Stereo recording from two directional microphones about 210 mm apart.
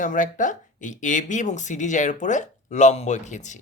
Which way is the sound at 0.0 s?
35° left (ahead or behind).